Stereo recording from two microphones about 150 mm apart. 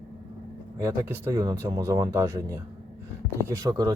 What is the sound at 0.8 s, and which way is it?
Speech, 15° right (ahead or behind).